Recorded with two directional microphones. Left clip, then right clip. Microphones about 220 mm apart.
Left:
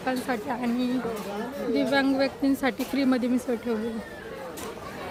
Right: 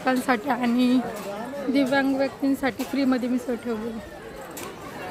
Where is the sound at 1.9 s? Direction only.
Centre (ahead or behind).